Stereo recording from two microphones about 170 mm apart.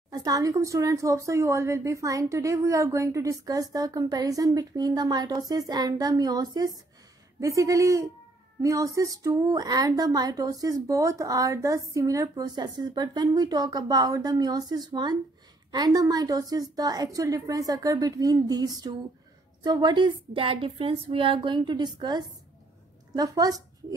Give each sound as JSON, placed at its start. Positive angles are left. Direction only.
{"t": 0.1, "sound": "speech", "side_deg": -20}